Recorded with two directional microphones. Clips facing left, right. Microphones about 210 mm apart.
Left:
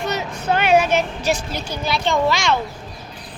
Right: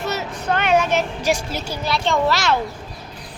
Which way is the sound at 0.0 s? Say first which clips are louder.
Left 1 dB; 5° right (ahead or behind).